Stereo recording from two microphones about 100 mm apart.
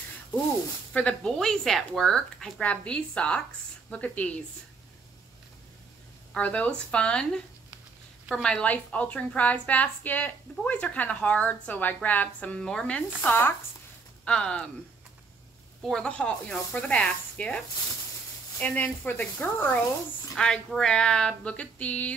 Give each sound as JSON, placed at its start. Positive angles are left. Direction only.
{"t": 0.9, "sound": "a woman's voice", "side_deg": 10}
{"t": 6.3, "sound": "a woman's voice", "side_deg": 15}
{"t": 14.2, "sound": "a woman's voice", "side_deg": 10}
{"t": 15.8, "sound": "a woman's voice", "side_deg": 5}
{"t": 18.6, "sound": "a woman's voice", "side_deg": 15}
{"t": 20.3, "sound": "a woman's voice", "side_deg": 5}